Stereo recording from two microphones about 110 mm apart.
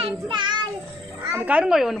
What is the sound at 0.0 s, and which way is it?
Child singing, 45° right (ahead or behind).